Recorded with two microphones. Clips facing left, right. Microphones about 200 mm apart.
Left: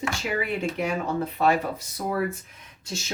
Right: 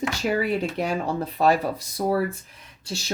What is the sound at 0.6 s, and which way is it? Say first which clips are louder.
Speech: right 1 dB; 35° right (ahead or behind).